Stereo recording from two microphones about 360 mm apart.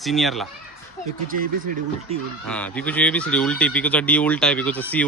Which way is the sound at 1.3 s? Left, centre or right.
Right.